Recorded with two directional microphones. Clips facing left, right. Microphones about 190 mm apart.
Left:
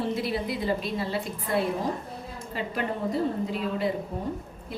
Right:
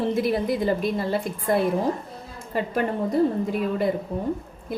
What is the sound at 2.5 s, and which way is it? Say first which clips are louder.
Speech: right 6 dB; 45° right (ahead or behind).